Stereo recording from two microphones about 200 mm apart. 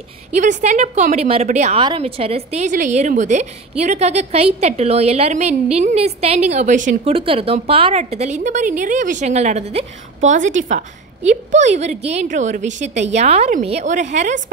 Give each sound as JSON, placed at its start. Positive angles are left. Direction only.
{"t": 0.3, "sound": "a woman's voice", "side_deg": -40}